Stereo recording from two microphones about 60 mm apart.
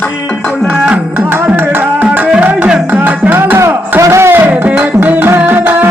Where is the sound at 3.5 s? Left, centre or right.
Right.